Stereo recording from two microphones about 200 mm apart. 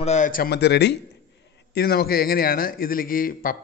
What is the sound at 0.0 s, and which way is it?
A man's voice, 35° left (ahead or behind).